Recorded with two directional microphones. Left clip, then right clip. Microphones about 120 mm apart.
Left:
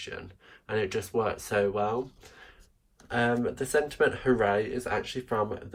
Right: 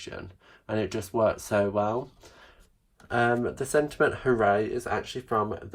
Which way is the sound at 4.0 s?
35° right (ahead or behind).